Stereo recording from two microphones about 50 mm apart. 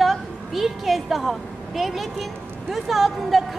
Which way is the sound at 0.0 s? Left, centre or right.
Centre.